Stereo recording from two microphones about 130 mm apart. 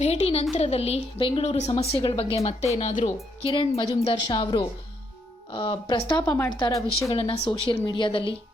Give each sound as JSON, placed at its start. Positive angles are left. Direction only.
{"t": 0.0, "sound": "speech", "side_deg": 50}
{"t": 1.5, "sound": "speech", "side_deg": 60}
{"t": 1.7, "sound": "speech", "side_deg": 45}
{"t": 3.4, "sound": "a woman's voice", "side_deg": 40}
{"t": 6.2, "sound": "speech", "side_deg": 15}
{"t": 7.1, "sound": "speech", "side_deg": 45}